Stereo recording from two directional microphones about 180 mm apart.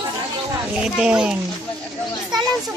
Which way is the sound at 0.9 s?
5° right (ahead or behind).